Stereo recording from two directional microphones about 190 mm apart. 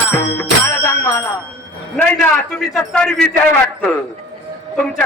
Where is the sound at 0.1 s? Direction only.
10° left (ahead or behind).